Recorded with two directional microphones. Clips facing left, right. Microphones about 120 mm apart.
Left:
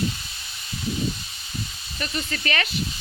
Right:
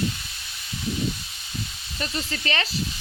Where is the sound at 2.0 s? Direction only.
25° right (ahead or behind).